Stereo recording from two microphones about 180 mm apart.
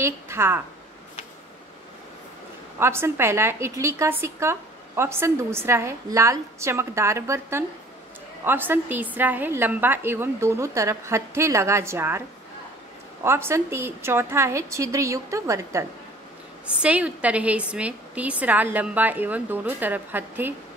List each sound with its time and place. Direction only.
0.0 s speech: 15° right (ahead or behind)
2.8 s a woman's voice: 15° right (ahead or behind)
13.2 s a woman's voice: 15° right (ahead or behind)
16.8 s a woman's voice: 5° right (ahead or behind)